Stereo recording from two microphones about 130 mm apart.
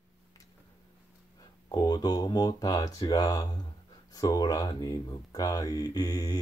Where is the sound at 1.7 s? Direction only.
30° left (ahead or behind).